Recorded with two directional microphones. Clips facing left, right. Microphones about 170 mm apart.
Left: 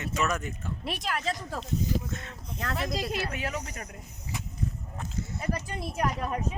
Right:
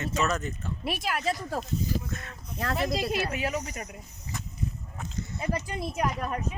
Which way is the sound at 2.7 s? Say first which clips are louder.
Right 3 dB; 10° right (ahead or behind).